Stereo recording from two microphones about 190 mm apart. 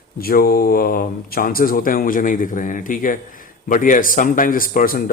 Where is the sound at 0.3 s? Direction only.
50° left (ahead or behind).